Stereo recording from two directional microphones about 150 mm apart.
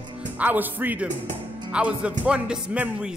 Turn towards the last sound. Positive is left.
turn(degrees=-10)  # may be behind; listen again after turning